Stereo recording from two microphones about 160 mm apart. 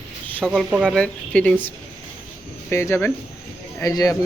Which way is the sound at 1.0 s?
5° left (ahead or behind).